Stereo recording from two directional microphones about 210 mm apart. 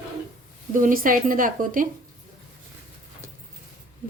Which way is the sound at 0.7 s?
40° right (ahead or behind).